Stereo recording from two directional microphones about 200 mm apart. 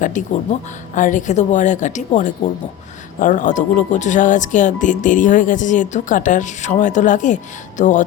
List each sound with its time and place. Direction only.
0.0 s speech: 40° left (ahead or behind)